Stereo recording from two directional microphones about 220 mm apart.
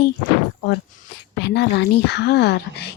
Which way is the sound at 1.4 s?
50° left (ahead or behind).